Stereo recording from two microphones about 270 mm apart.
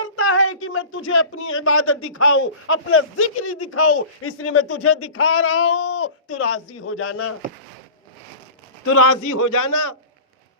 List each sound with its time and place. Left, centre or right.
0.0 s speech: left
8.8 s a man's voice: left